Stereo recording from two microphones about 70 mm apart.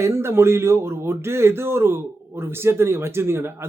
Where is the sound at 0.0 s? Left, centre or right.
Right.